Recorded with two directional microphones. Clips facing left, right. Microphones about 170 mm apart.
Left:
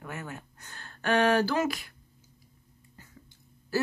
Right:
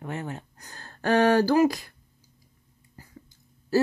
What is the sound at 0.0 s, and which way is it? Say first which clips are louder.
Speech: right 6 dB; 30° right (ahead or behind).